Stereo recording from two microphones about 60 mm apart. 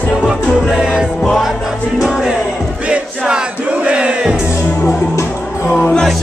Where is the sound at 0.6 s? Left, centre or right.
Centre.